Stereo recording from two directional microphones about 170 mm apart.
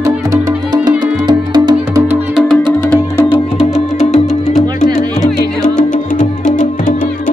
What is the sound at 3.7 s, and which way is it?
Music, 40° left (ahead or behind).